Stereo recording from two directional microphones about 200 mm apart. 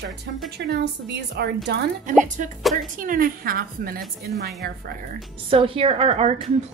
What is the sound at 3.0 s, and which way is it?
A woman's voice, 45° right (ahead or behind).